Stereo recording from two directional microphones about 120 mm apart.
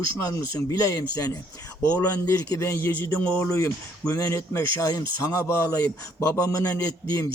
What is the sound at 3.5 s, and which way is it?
Speech, 25° left (ahead or behind).